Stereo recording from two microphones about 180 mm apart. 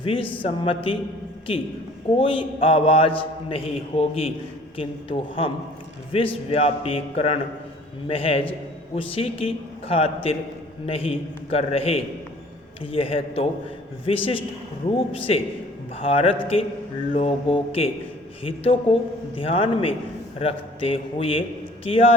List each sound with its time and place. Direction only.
0.0 s a man's voice: 30° left (ahead or behind)